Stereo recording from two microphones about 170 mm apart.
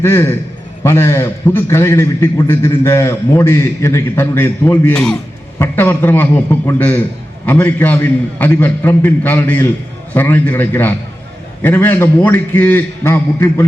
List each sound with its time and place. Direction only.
0.0 s a man's voice: 15° left (ahead or behind)